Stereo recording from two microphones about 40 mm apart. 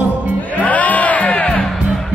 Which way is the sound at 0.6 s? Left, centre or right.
Left.